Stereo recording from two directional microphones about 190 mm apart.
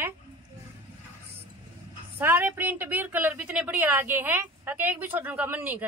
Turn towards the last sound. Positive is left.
turn(degrees=-10)  # may be behind; listen again after turning